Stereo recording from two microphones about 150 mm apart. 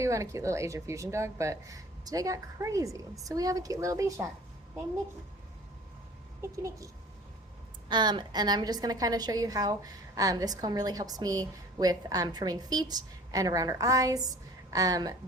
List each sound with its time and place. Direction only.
0.0 s a woman's voice: 20° right (ahead or behind)
6.4 s a woman's voice: 20° right (ahead or behind)
7.9 s a woman's voice: 30° right (ahead or behind)